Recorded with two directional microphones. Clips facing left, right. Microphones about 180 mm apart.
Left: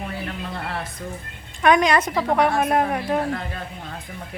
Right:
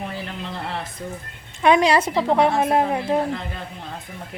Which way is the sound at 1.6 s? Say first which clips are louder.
Right 1 dB; 30° right (ahead or behind).